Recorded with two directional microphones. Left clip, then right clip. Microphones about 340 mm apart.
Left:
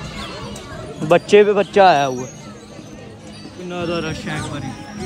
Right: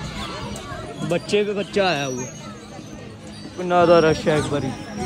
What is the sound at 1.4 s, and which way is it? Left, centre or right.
Speech, left.